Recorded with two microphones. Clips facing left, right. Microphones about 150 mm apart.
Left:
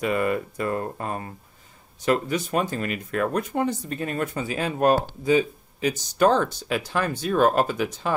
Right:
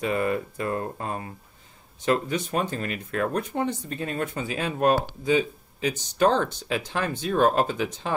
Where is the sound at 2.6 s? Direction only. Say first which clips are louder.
Left 2 dB; 5° left (ahead or behind).